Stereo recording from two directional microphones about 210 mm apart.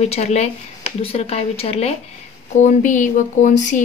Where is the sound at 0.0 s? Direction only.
30° left (ahead or behind).